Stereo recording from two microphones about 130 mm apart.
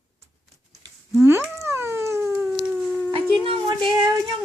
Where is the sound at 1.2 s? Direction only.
20° right (ahead or behind).